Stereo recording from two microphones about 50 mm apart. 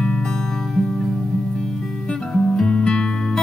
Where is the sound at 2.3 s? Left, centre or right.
Centre.